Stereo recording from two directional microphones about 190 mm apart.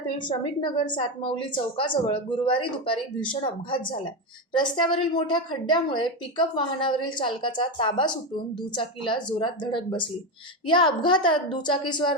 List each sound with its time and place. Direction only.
0.2 s a woman's voice: 25° left (ahead or behind)